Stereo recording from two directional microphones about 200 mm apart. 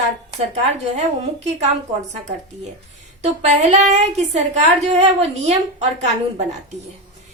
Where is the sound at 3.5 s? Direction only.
35° right (ahead or behind).